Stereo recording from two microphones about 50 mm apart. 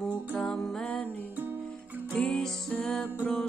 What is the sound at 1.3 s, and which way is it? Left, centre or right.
Music, right.